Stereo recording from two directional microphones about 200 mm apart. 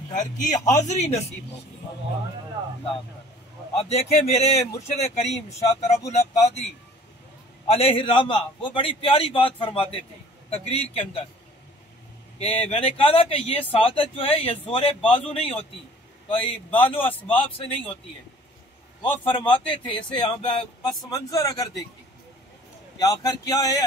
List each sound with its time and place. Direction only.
0.1 s speech: 40° left (ahead or behind)
3.7 s speech: 35° left (ahead or behind)
7.7 s speech: 30° left (ahead or behind)
12.4 s speech: 30° left (ahead or behind)
19.2 s speech: 25° left (ahead or behind)
22.9 s speech: 20° left (ahead or behind)